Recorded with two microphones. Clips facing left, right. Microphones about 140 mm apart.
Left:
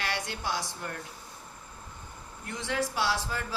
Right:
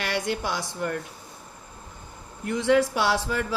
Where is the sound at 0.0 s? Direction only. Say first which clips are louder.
Right 6 dB; 90° right.